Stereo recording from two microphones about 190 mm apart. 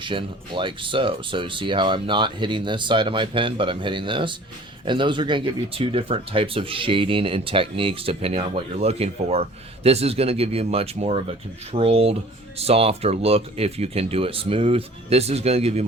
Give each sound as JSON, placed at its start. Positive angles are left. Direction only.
{"t": 0.0, "sound": "speech", "side_deg": -25}